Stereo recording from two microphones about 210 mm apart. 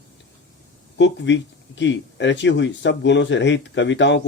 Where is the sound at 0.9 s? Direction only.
55° left (ahead or behind).